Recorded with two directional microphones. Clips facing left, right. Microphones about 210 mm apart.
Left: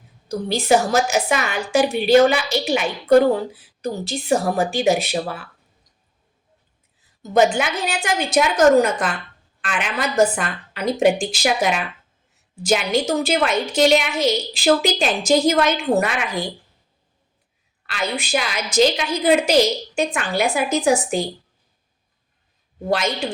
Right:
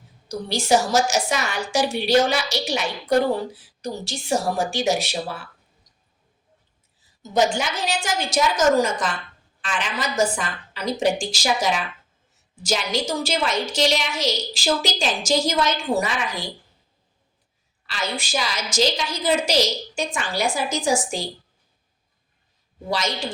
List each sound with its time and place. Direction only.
0.6 s a woman's voice: 55° left (ahead or behind)
4.3 s a woman's voice: 55° left (ahead or behind)
7.3 s a woman's voice: 60° left (ahead or behind)
17.8 s a woman's voice: 60° left (ahead or behind)
22.9 s a woman's voice: 55° left (ahead or behind)